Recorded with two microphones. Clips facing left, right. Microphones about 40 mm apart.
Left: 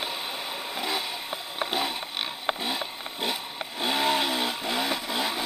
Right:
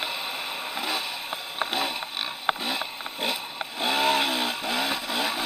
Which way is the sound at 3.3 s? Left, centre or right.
Right.